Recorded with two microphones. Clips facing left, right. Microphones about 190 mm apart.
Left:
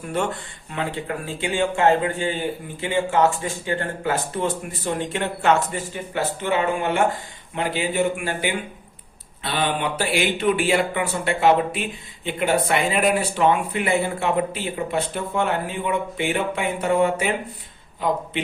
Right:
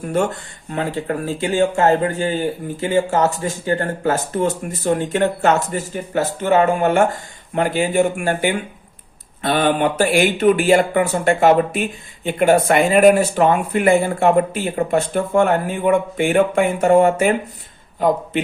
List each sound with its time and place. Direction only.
0.7 s speech: 40° right (ahead or behind)